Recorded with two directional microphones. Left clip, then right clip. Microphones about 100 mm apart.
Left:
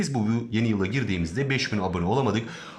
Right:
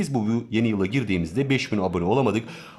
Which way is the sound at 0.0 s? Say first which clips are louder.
Right 2 dB; 35° right (ahead or behind).